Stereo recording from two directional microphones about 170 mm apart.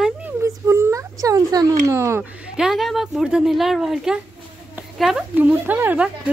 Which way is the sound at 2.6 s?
Centre (ahead or behind).